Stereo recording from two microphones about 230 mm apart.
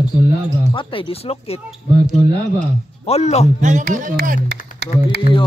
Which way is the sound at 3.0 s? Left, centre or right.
Left.